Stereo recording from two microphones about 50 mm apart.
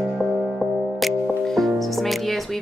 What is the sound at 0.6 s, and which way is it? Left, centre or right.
Music, centre.